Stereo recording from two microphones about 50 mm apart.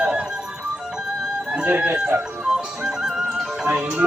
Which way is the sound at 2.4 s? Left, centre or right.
Centre.